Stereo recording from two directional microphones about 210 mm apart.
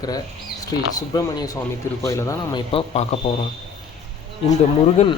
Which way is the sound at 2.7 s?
25° left (ahead or behind).